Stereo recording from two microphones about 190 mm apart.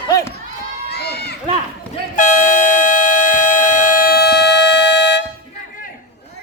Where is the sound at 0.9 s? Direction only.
60° left (ahead or behind).